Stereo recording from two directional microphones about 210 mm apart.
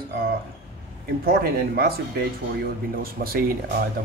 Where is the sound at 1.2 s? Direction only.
50° right (ahead or behind).